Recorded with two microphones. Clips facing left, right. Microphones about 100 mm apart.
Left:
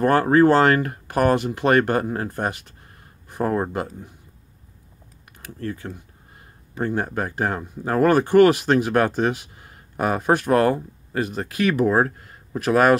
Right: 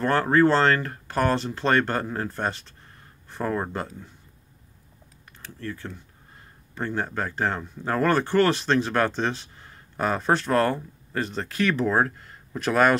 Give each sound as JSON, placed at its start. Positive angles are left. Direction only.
{"t": 0.0, "sound": "speech", "side_deg": 15}
{"t": 5.8, "sound": "speech", "side_deg": 15}